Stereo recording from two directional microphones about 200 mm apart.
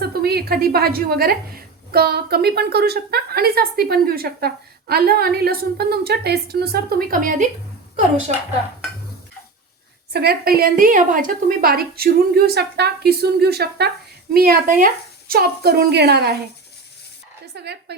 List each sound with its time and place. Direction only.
0.0 s a woman's voice: 50° right (ahead or behind)
10.1 s a woman's voice: 55° right (ahead or behind)
17.4 s a sound: 55° right (ahead or behind)